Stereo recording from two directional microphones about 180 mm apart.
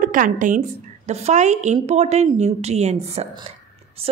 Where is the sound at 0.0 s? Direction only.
50° right (ahead or behind).